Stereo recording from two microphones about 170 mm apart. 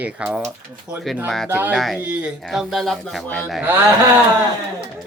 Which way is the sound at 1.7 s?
Centre (ahead or behind).